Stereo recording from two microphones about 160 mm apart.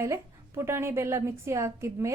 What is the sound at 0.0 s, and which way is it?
A woman's voice, 15° right (ahead or behind).